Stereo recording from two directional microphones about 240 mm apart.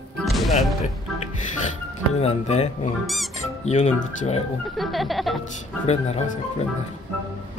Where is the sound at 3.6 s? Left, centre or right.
Left.